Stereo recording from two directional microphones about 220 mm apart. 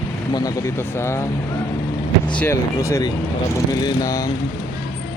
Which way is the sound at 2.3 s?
10° left (ahead or behind).